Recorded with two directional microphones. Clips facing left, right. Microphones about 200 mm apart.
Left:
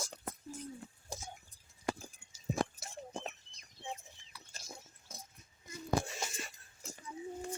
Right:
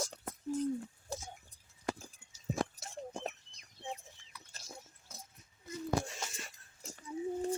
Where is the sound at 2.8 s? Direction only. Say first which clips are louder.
Right 1 dB; 40° right (ahead or behind).